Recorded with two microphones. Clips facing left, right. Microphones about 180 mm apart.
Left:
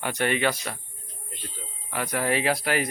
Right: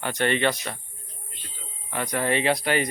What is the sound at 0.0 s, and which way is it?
Speech, 10° left (ahead or behind).